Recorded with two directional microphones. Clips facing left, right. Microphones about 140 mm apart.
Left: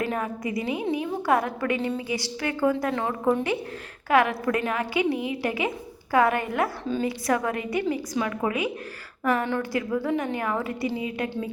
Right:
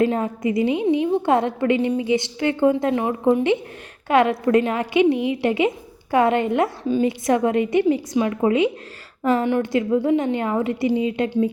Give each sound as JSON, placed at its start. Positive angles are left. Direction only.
{"t": 0.0, "sound": "a woman's voice", "side_deg": -25}